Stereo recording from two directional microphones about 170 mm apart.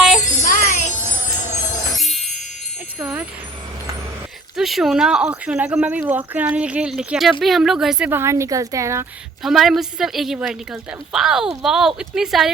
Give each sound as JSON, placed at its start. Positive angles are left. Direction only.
{"t": 0.4, "sound": "music", "side_deg": 50}
{"t": 2.0, "sound": "music", "side_deg": 0}
{"t": 3.0, "sound": "vehicle", "side_deg": -10}
{"t": 4.5, "sound": "speech", "side_deg": 0}
{"t": 9.4, "sound": "a woman's voice", "side_deg": 0}